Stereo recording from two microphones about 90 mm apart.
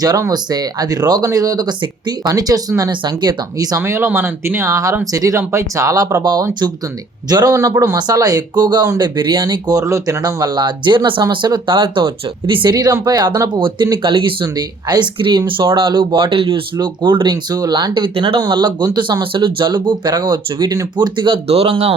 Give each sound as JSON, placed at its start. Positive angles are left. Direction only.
{"t": 0.0, "sound": "speech", "side_deg": -45}
{"t": 3.0, "sound": "speech", "side_deg": -55}
{"t": 3.8, "sound": "speech", "side_deg": -30}
{"t": 7.3, "sound": "speech", "side_deg": -45}
{"t": 12.7, "sound": "speech", "side_deg": -45}
{"t": 13.5, "sound": "speech", "side_deg": -65}
{"t": 14.5, "sound": "speech", "side_deg": -50}
{"t": 15.4, "sound": "speech", "side_deg": -70}
{"t": 16.7, "sound": "speech", "side_deg": -55}
{"t": 17.5, "sound": "speech", "side_deg": -50}
{"t": 19.2, "sound": "speech", "side_deg": -70}